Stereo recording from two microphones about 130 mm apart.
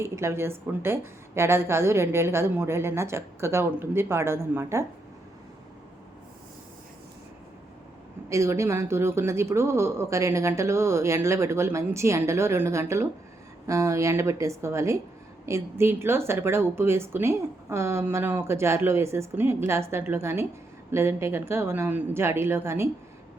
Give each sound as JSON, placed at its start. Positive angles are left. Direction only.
{"t": 0.0, "sound": "speech", "side_deg": -20}
{"t": 8.3, "sound": "speech", "side_deg": -20}